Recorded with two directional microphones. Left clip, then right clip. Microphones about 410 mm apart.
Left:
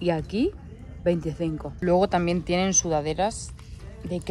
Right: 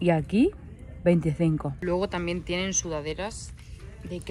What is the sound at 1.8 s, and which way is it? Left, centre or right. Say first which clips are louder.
Speech: left 7 dB; left.